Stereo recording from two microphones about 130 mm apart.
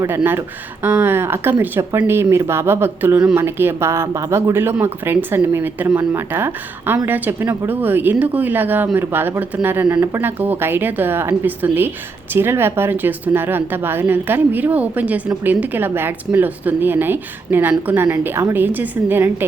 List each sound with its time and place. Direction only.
0.2 s speech: 15° right (ahead or behind)